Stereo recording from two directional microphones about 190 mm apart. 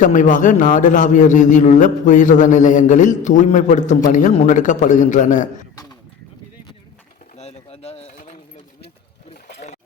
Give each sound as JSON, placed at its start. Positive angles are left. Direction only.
{"t": 0.0, "sound": "a man's voice", "side_deg": 40}
{"t": 7.3, "sound": "pigeon", "side_deg": 35}